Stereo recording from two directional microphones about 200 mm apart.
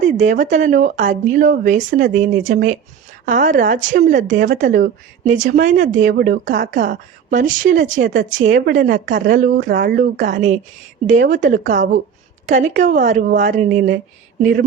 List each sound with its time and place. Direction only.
0.2 s speech: 40° right (ahead or behind)
9.7 s speech: 50° right (ahead or behind)